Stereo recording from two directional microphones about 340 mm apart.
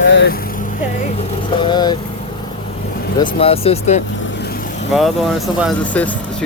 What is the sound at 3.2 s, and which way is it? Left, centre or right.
Speech, centre.